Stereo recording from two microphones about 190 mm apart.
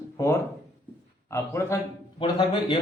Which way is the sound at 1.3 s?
15° left (ahead or behind).